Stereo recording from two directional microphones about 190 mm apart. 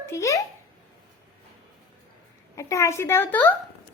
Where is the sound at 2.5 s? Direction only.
15° left (ahead or behind).